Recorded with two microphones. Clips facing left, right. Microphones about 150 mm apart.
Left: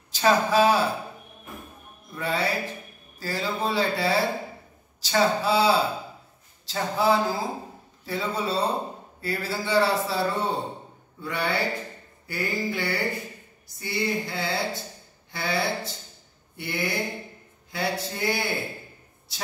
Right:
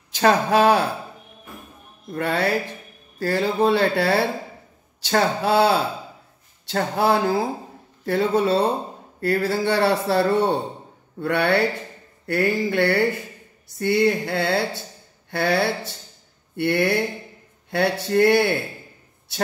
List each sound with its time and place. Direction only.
0.1 s speech: 60° right (ahead or behind)
2.0 s speech: 60° right (ahead or behind)
11.1 s a sound: 65° right (ahead or behind)
13.7 s speech: 65° right (ahead or behind)
15.3 s a sound: 65° right (ahead or behind)
17.6 s speech: 65° right (ahead or behind)